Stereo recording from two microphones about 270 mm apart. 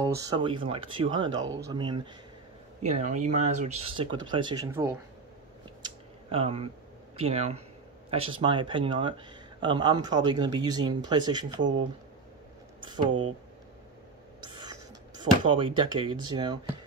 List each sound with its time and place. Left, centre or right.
0.0 s speech: centre
5.8 s a sound: centre
7.2 s speech: right
14.6 s speech: centre